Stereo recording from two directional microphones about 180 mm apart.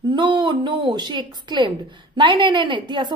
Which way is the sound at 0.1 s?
25° right (ahead or behind).